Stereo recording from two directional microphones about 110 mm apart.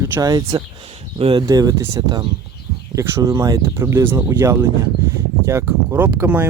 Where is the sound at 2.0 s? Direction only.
40° right (ahead or behind).